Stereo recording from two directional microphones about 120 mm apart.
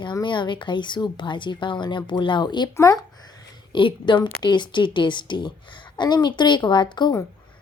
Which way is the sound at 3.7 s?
40° left (ahead or behind).